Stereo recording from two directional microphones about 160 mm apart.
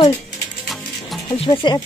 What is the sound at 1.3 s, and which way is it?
Speech, 35° left (ahead or behind).